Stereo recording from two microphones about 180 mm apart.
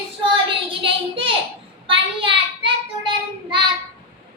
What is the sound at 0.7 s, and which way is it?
Child singing, 30° right (ahead or behind).